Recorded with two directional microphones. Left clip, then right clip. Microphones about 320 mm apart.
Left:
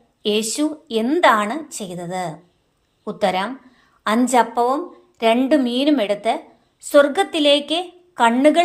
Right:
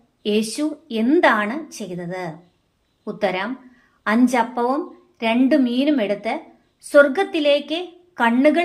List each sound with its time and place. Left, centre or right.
0.2 s a woman's voice: centre